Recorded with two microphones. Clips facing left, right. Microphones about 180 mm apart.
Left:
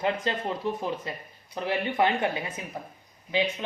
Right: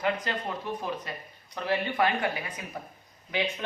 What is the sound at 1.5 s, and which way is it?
Speech, 20° left (ahead or behind).